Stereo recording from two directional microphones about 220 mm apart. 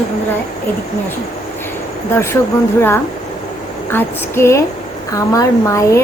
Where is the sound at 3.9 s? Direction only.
10° left (ahead or behind).